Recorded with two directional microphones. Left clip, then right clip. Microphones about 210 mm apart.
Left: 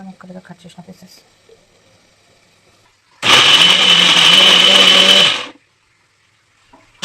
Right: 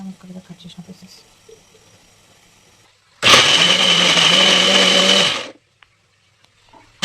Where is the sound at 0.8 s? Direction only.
20° left (ahead or behind).